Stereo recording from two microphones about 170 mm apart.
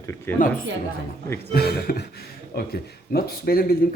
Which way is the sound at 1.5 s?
65° left (ahead or behind).